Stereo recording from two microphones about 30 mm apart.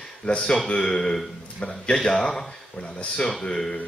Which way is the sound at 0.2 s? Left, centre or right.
Left.